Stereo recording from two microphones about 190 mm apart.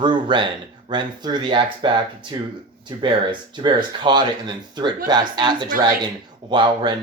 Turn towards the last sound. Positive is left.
turn(degrees=-25)  # may be behind; listen again after turning